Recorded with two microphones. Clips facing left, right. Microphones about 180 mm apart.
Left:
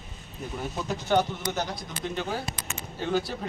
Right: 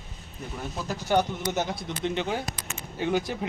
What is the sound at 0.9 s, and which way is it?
A man's voice, 10° right (ahead or behind).